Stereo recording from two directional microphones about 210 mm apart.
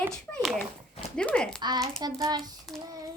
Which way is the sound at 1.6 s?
20° right (ahead or behind).